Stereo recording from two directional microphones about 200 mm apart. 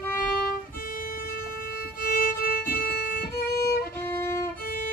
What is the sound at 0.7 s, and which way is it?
Violin, 45° left (ahead or behind).